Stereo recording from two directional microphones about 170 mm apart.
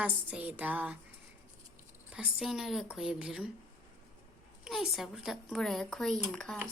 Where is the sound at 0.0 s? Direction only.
10° right (ahead or behind).